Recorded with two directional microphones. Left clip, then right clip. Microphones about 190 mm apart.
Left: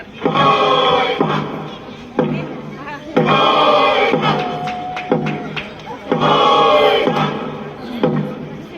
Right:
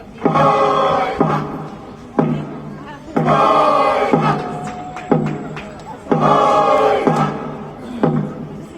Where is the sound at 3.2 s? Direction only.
45° right (ahead or behind).